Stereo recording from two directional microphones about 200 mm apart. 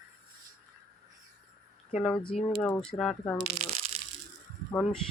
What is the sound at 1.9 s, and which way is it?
Speech, centre (ahead or behind).